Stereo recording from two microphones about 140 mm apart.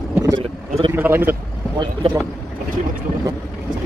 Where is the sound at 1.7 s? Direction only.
30° right (ahead or behind).